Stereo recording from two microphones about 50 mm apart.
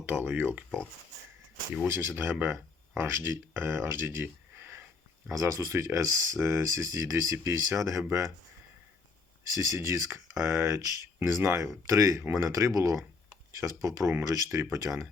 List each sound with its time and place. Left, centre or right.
0.0 s speech: right
1.9 s speech: right
5.3 s speech: right
6.5 s speech: right
9.5 s speech: right
9.7 s speech: right
11.9 s speech: right